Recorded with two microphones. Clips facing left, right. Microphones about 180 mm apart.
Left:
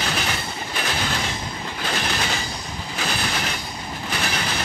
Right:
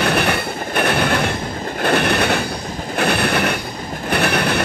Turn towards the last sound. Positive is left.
turn(degrees=-60)  # may be behind; listen again after turning